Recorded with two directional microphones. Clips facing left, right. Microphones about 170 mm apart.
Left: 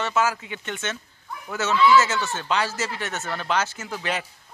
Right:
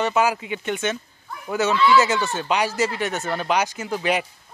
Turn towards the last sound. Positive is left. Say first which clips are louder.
# right 6 dB
turn(degrees=-15)  # may be behind; listen again after turning